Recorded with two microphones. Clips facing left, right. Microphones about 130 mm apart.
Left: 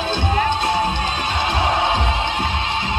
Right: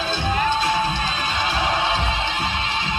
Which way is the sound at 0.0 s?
55° left (ahead or behind).